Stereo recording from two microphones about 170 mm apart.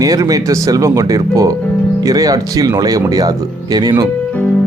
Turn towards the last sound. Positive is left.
turn(degrees=-25)  # may be behind; listen again after turning